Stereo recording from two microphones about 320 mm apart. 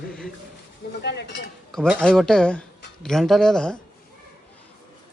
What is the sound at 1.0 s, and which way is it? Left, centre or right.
Stir, left.